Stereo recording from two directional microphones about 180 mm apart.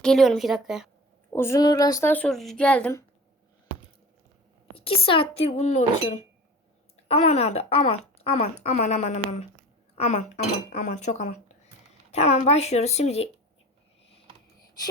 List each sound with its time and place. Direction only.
0.0 s a woman's voice: centre (ahead or behind)
1.3 s a woman's voice: 15° left (ahead or behind)
4.7 s speech: 30° left (ahead or behind)